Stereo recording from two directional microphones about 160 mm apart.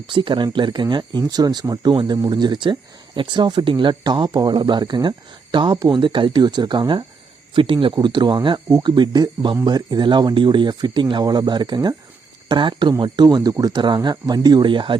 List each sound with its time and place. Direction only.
0.1 s speech: 30° right (ahead or behind)